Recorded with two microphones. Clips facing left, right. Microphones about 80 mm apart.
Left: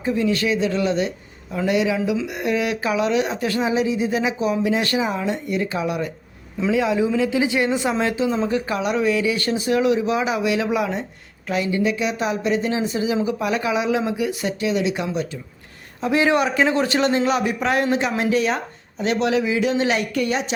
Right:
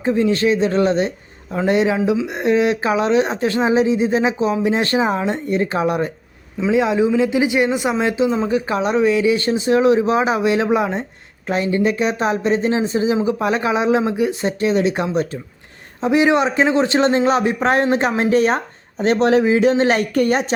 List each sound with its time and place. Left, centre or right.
0.0 s speech: right
6.7 s speech: right
16.0 s speech: right